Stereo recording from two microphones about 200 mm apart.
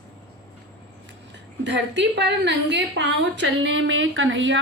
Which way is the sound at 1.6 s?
60° right (ahead or behind).